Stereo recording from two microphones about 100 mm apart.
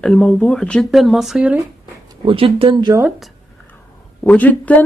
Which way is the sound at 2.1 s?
55° right (ahead or behind).